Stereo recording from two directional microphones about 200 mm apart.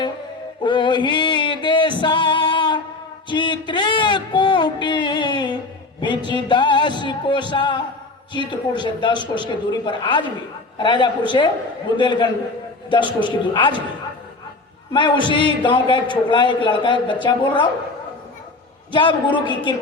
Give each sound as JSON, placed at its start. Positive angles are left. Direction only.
{"t": 0.6, "sound": "male singing", "side_deg": 25}
{"t": 3.2, "sound": "a sound", "side_deg": 25}
{"t": 6.0, "sound": "music", "side_deg": 25}
{"t": 8.3, "sound": "a man's voice", "side_deg": 25}
{"t": 14.9, "sound": "a man's voice", "side_deg": 25}
{"t": 18.9, "sound": "a man's voice", "side_deg": 25}